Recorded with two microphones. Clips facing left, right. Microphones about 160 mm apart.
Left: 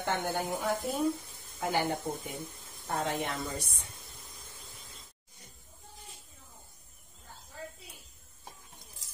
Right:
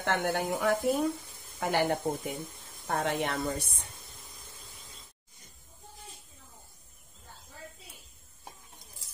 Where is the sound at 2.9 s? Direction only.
60° right (ahead or behind).